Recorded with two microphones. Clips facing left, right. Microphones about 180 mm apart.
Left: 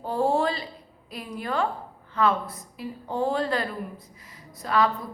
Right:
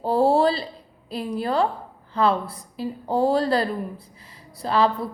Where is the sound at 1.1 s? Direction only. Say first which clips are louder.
Right 6 dB; 30° right (ahead or behind).